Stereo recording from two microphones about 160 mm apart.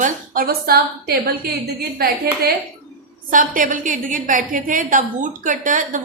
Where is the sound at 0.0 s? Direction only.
65° right (ahead or behind).